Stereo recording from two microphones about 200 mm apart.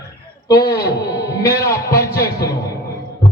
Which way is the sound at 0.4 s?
20° left (ahead or behind).